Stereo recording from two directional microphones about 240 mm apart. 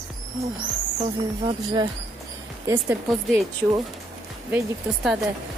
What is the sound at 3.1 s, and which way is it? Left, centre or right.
Speech, centre.